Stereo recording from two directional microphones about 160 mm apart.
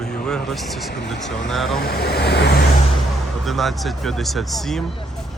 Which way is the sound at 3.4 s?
Centre (ahead or behind).